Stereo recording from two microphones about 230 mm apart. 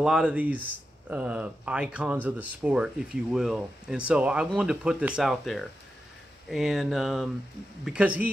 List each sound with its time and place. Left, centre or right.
0.0 s speech: centre